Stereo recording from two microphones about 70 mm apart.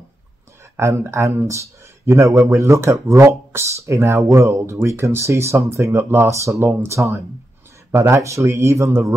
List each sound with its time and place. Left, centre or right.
0.7 s speech: right